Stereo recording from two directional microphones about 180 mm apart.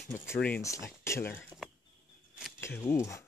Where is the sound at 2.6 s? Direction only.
15° left (ahead or behind).